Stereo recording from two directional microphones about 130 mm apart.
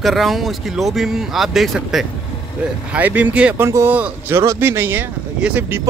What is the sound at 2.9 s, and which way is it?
Speech, 10° right (ahead or behind).